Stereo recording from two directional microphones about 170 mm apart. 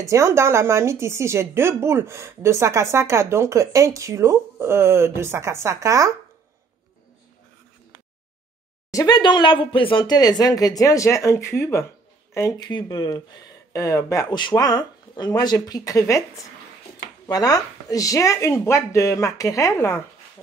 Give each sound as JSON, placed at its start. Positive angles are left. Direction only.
{"t": 0.0, "sound": "speech", "side_deg": -15}
{"t": 8.9, "sound": "speech", "side_deg": 25}
{"t": 17.3, "sound": "speech", "side_deg": 20}